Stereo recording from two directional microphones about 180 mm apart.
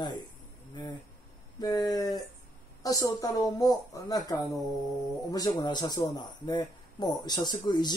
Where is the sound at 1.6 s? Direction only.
20° left (ahead or behind).